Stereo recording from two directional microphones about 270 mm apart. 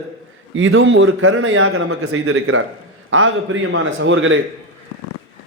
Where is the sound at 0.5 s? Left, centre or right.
Right.